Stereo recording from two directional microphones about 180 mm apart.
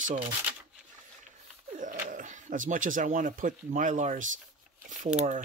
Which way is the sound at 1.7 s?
45° right (ahead or behind).